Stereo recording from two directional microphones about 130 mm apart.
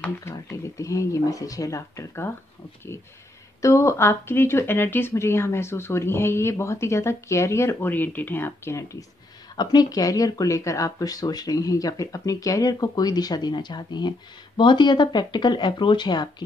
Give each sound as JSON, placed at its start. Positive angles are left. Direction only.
{"t": 0.7, "sound": "speech", "side_deg": 25}
{"t": 3.6, "sound": "speech", "side_deg": 25}
{"t": 9.6, "sound": "speech", "side_deg": 30}